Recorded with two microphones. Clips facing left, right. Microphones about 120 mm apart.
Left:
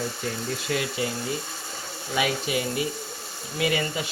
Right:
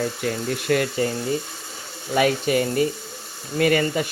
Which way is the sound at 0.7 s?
50° right (ahead or behind).